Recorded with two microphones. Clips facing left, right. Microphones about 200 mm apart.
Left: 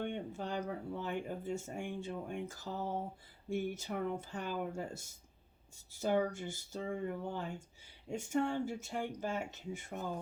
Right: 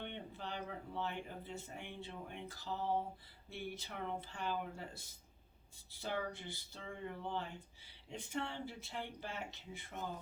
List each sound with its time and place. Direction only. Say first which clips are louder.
0.0 s speech: left 7 dB; 45° left (ahead or behind)